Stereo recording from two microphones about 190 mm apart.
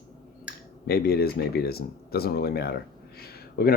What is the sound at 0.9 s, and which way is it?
Speech, 55° left (ahead or behind).